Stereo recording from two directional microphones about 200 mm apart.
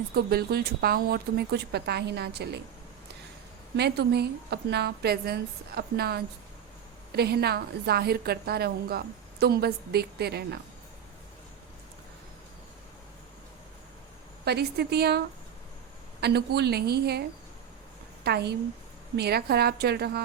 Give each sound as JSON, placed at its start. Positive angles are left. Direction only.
{"t": 0.1, "sound": "a woman's voice", "side_deg": -50}
{"t": 3.8, "sound": "a woman's voice", "side_deg": -55}
{"t": 14.4, "sound": "a woman's voice", "side_deg": -55}
{"t": 16.2, "sound": "a woman's voice", "side_deg": -55}